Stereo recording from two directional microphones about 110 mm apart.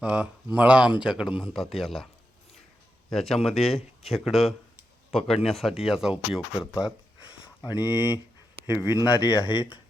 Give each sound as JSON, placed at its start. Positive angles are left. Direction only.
{"t": 0.0, "sound": "speech", "side_deg": -10}
{"t": 1.3, "sound": "a man's voice", "side_deg": 50}
{"t": 1.5, "sound": "speech", "side_deg": 0}
{"t": 3.1, "sound": "speech", "side_deg": 5}
{"t": 8.7, "sound": "speech", "side_deg": 35}